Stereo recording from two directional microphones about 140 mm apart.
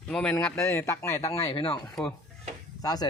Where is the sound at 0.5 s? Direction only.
20° left (ahead or behind).